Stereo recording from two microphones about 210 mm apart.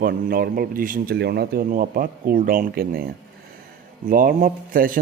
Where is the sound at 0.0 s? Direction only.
45° right (ahead or behind).